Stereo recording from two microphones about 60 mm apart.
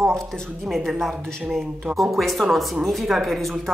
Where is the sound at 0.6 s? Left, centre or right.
Centre.